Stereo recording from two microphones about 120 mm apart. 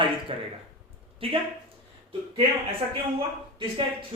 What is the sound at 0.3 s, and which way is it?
A man's voice, 50° right (ahead or behind).